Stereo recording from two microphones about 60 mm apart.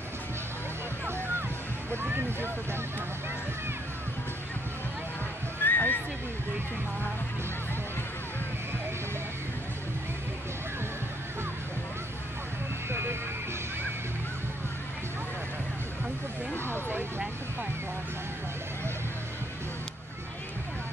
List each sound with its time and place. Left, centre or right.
1.0 s music: right
1.9 s vehicle: right
5.6 s neigh: left
12.9 s music: right
16.6 s a sound: right